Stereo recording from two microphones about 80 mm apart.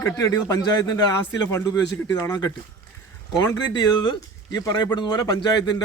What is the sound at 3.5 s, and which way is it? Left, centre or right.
Speech, left.